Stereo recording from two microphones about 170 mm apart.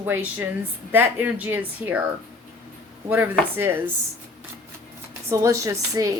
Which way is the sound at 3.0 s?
10° right (ahead or behind).